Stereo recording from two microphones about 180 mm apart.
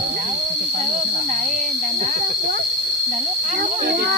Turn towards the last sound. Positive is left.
turn(degrees=-45)  # may be behind; listen again after turning